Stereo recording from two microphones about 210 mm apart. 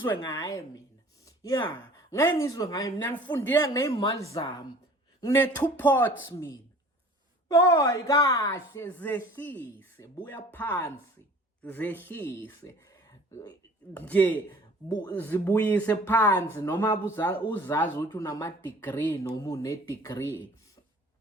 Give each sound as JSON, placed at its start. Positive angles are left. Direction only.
{"t": 0.2, "sound": "a woman's voice", "side_deg": 20}
{"t": 7.7, "sound": "speech", "side_deg": 15}